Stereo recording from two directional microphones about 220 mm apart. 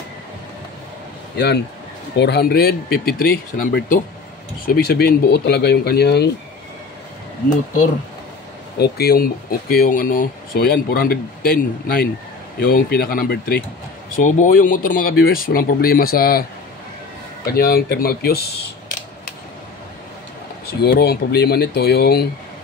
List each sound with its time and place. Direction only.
1.3 s speech: 50° left (ahead or behind)
8.7 s speech: 45° left (ahead or behind)
17.5 s speech: 45° left (ahead or behind)
20.8 s speech: 45° left (ahead or behind)